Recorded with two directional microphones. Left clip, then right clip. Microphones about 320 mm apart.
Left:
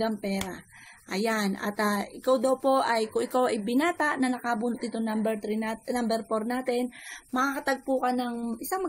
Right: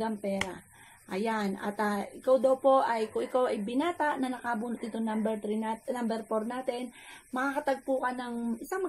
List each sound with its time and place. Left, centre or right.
0.0 s a woman's voice: left